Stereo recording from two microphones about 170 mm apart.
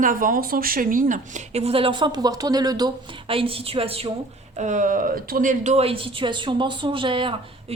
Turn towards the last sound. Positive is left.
turn(degrees=-30)  # may be behind; listen again after turning